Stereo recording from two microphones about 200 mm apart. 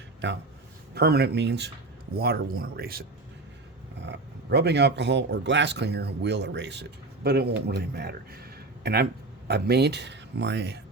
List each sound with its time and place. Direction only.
0.9 s a man's voice: 55° right (ahead or behind)
4.0 s a man's voice: 60° right (ahead or behind)